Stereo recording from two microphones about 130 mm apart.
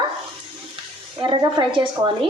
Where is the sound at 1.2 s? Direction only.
35° right (ahead or behind).